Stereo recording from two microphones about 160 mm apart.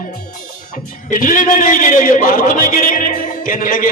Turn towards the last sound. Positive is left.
turn(degrees=60)  # may be behind; listen again after turning